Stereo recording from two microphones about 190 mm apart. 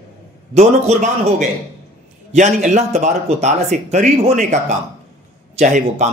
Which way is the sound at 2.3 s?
40° right (ahead or behind).